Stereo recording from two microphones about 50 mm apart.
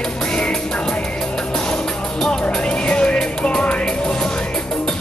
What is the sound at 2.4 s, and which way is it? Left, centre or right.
Music, centre.